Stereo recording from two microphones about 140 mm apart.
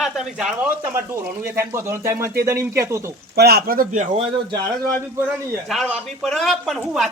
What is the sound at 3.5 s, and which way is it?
Speech, 90° right.